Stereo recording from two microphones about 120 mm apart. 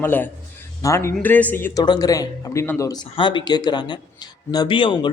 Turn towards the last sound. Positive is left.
turn(degrees=45)  # may be behind; listen again after turning